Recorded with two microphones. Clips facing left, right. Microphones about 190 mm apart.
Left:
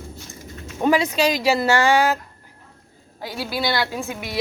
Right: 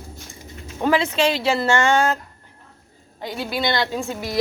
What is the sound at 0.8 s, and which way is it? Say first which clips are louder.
A woman's voice: left 1 dB; 15° left (ahead or behind).